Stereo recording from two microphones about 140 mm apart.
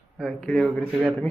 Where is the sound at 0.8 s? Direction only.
10° right (ahead or behind).